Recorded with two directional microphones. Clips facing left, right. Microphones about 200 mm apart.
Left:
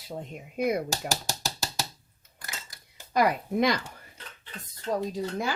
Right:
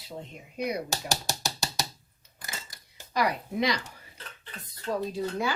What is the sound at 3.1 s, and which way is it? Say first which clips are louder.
Speech: left 4 dB; 50° left (ahead or behind).